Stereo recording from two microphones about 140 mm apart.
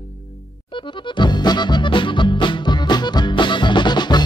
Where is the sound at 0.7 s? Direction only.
35° left (ahead or behind).